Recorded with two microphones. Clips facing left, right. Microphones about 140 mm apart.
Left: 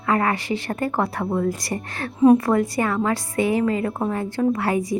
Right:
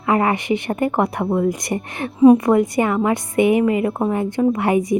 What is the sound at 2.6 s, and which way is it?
A woman's voice, 20° right (ahead or behind).